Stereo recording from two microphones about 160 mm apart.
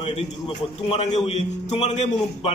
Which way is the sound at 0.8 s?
35° left (ahead or behind).